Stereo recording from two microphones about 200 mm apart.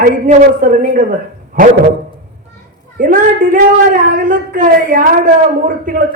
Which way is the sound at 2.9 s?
40° right (ahead or behind).